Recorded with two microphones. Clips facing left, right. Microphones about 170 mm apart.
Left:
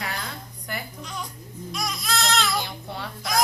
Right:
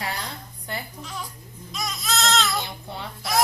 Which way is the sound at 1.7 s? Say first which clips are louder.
Even; centre (ahead or behind).